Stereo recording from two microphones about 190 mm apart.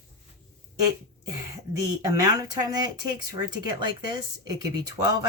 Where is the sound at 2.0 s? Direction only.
20° right (ahead or behind).